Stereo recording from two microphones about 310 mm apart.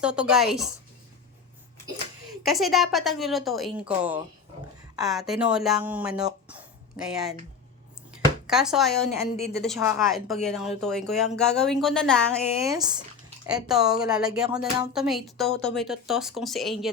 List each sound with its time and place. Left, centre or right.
0.0 s speech: centre
2.4 s speech: centre
8.4 s speech: centre
9.2 s a woman's voice: left
9.6 s speech: centre
12.5 s speech: centre